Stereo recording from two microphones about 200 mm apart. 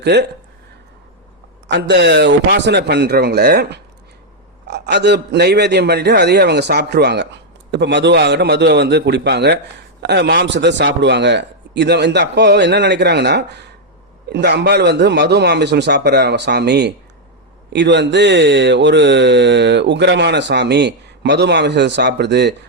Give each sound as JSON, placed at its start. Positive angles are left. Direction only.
{"t": 0.0, "sound": "speech", "side_deg": -55}
{"t": 1.6, "sound": "speech", "side_deg": -60}